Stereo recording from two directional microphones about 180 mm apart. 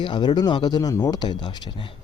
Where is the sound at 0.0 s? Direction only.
25° left (ahead or behind).